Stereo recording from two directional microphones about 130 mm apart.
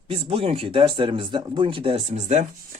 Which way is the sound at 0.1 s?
45° right (ahead or behind).